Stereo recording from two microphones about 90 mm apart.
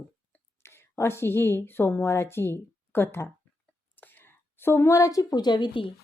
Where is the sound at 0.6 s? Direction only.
30° left (ahead or behind).